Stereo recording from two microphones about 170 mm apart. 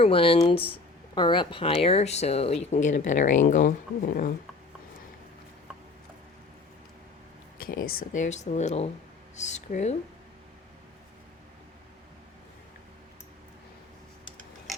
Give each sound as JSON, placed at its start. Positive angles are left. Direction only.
{"t": 0.0, "sound": "speech", "side_deg": 35}
{"t": 7.6, "sound": "speech", "side_deg": 55}